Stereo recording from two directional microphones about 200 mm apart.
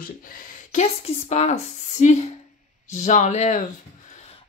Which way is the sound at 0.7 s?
35° left (ahead or behind).